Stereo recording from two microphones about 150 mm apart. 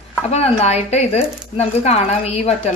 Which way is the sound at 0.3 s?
45° left (ahead or behind).